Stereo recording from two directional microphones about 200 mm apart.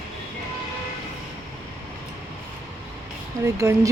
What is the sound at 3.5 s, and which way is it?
Speech, 15° right (ahead or behind).